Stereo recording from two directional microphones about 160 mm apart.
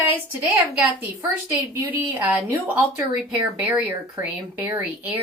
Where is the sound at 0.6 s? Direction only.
10° right (ahead or behind).